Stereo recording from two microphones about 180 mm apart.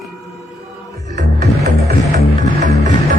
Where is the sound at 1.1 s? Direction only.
60° right (ahead or behind).